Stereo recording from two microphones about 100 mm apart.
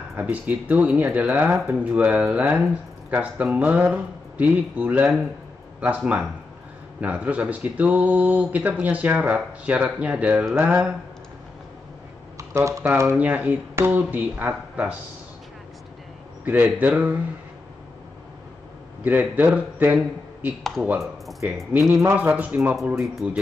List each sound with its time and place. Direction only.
0.2 s a man's voice: 15° right (ahead or behind)
12.4 s speech: 30° right (ahead or behind)
13.1 s speech: 15° right (ahead or behind)
16.4 s speech: 15° right (ahead or behind)
19.0 s speech: 15° right (ahead or behind)
21.4 s a man's voice: 15° right (ahead or behind)